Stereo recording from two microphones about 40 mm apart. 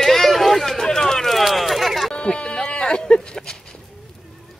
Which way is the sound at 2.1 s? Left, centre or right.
Left.